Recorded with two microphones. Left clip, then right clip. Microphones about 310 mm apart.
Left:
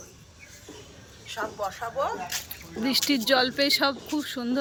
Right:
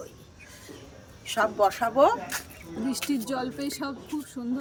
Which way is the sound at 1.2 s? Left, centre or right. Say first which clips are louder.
Right 8 dB; right.